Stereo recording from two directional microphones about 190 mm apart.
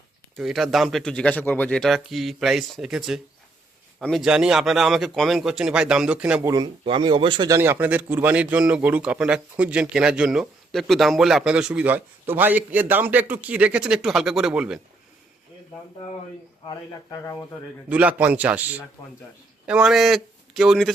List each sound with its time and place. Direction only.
0.3 s speech: centre (ahead or behind)
6.5 s speech: 25° right (ahead or behind); by 14.8 s 5° right (ahead or behind)
16.6 s speech: 20° left (ahead or behind)
17.8 s a man's voice: 5° right (ahead or behind)